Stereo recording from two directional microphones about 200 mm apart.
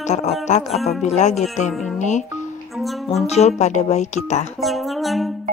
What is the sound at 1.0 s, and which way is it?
Speech, 35° left (ahead or behind).